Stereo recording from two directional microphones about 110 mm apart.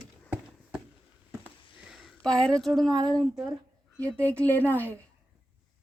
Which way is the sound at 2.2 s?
5° left (ahead or behind).